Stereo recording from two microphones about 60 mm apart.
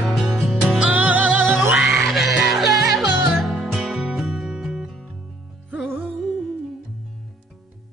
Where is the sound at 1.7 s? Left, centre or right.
Centre.